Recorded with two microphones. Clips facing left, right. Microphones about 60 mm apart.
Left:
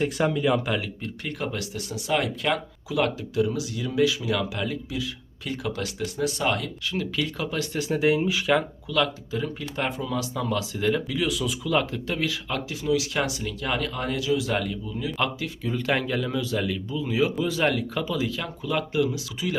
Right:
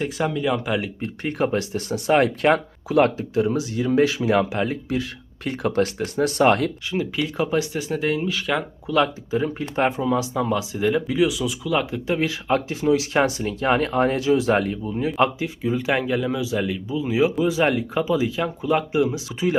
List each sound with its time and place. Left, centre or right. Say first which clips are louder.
0.0 s speech: even; centre
1.0 s speech: right 7 dB; right
6.9 s speech: even; centre
7.7 s speech: left 1 dB; centre
8.9 s speech: right 6 dB; right; by 11.9 s centre
12.0 s speech: right 6 dB; right
15.4 s speech: right 5 dB; centre